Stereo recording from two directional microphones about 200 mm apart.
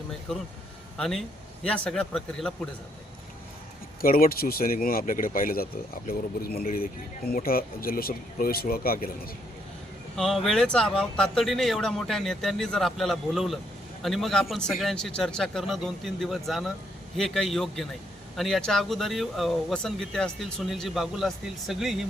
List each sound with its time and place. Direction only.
0.3 s speech: 5° left (ahead or behind)
4.0 s speech: 45° left (ahead or behind)
10.2 s speech: centre (ahead or behind)